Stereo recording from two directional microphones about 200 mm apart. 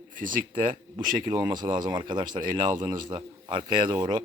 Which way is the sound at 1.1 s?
20° right (ahead or behind).